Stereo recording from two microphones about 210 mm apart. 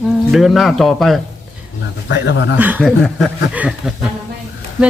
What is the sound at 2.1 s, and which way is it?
Speech, 55° left (ahead or behind).